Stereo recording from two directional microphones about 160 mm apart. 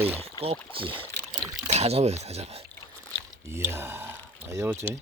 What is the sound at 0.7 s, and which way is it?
Rowboat, 35° right (ahead or behind).